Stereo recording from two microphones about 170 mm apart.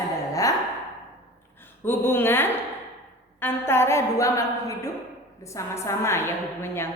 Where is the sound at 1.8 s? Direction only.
10° left (ahead or behind).